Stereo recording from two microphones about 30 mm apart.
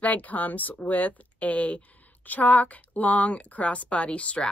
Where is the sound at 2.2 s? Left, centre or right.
Left.